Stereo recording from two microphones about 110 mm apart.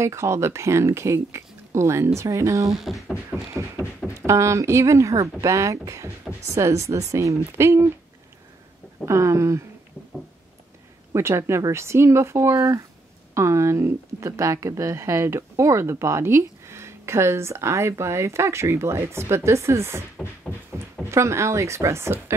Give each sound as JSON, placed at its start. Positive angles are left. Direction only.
{"t": 0.0, "sound": "speech", "side_deg": -25}
{"t": 2.8, "sound": "beatboxing", "side_deg": 0}
{"t": 3.8, "sound": "speech", "side_deg": -25}
{"t": 9.0, "sound": "speech", "side_deg": -25}
{"t": 11.1, "sound": "speech", "side_deg": -25}
{"t": 21.1, "sound": "speech", "side_deg": -25}